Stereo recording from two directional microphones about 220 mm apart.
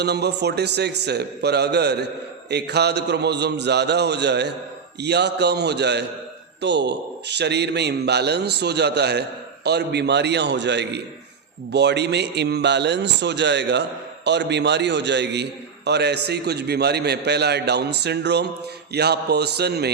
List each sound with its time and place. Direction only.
0.0 s a man's voice: 50° right (ahead or behind)